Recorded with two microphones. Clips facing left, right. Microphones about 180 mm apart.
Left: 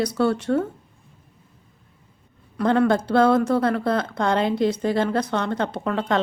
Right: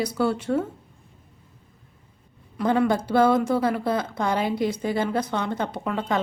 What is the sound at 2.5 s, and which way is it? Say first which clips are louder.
A woman's voice: left 3 dB; 10° right (ahead or behind).